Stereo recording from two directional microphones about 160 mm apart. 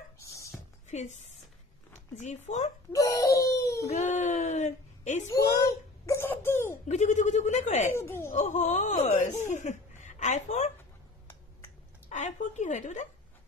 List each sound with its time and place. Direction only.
0.2 s a sound: 20° left (ahead or behind)
0.8 s speech: 50° left (ahead or behind)
2.9 s speech: 20° left (ahead or behind)
3.9 s speech: 50° left (ahead or behind)
5.3 s wail: 20° left (ahead or behind)
6.9 s speech: 50° left (ahead or behind)
7.9 s speech: 15° left (ahead or behind)
8.3 s speech: 50° left (ahead or behind)
12.1 s speech: 50° left (ahead or behind)